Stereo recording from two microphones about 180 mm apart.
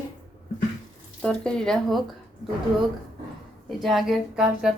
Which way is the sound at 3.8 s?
Centre (ahead or behind).